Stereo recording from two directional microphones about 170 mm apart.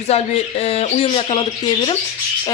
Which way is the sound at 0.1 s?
40° left (ahead or behind).